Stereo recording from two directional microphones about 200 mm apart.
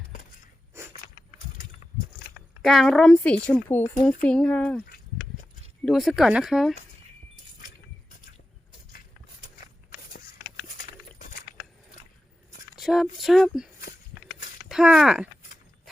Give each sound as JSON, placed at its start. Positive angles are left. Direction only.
{"t": 0.7, "sound": "walk", "side_deg": -15}
{"t": 2.6, "sound": "a woman's voice", "side_deg": 0}
{"t": 5.8, "sound": "a woman's voice", "side_deg": 0}
{"t": 10.6, "sound": "a sound", "side_deg": 45}
{"t": 12.7, "sound": "a sound", "side_deg": 0}
{"t": 14.7, "sound": "speech", "side_deg": -5}